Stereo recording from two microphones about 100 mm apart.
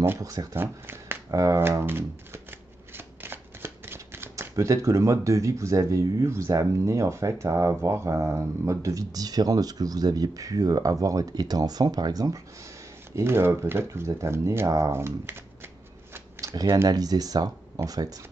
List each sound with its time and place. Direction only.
0.2 s speech: 35° right (ahead or behind)
0.6 s speech: 25° right (ahead or behind); by 12.4 s 40° right (ahead or behind)
13.1 s speech: 25° right (ahead or behind)
16.3 s speech: 35° right (ahead or behind)